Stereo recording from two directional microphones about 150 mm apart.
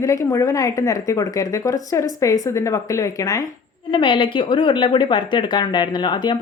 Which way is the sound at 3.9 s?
35° left (ahead or behind).